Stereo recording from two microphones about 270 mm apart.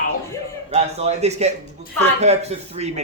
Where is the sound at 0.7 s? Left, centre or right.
Right.